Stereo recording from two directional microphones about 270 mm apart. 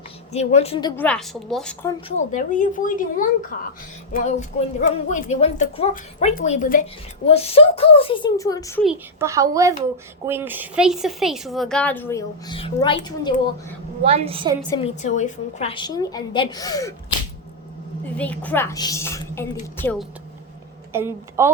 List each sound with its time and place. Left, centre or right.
0.3 s a woman's voice: left
1.0 s speech: centre
2.0 s a woman's voice: left
8.8 s a woman's voice: centre
14.0 s a woman's voice: right
14.8 s a woman's voice: left
18.2 s a woman's voice: centre
20.9 s a woman's voice: centre